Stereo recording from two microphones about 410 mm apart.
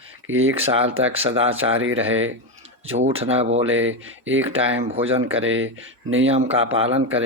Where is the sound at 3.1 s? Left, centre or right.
Centre.